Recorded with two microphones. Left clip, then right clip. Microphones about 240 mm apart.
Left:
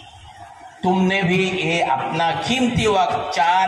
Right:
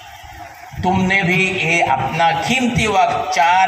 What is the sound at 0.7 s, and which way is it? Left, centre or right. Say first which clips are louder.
A man's voice: right 3 dB; right.